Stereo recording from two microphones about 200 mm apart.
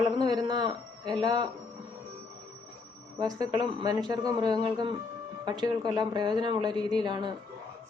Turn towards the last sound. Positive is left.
turn(degrees=-20)  # may be behind; listen again after turning